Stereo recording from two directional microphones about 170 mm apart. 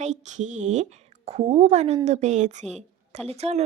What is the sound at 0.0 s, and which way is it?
A woman's voice, 45° right (ahead or behind).